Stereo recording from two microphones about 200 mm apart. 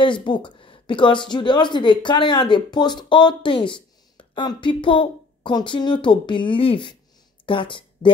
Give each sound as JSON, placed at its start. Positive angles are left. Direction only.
{"t": 0.0, "sound": "a woman's voice", "side_deg": 25}